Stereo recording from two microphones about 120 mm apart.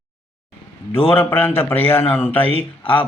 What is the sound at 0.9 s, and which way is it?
Speech, 50° left (ahead or behind).